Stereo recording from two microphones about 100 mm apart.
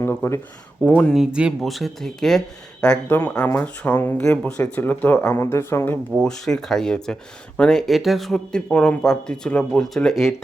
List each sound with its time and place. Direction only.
0.0 s speech: 15° left (ahead or behind)
1.1 s speech: 10° right (ahead or behind); by 6.0 s 20° left (ahead or behind)
6.2 s speech: 5° left (ahead or behind)